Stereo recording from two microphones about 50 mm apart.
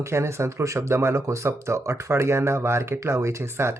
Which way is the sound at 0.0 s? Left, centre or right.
Right.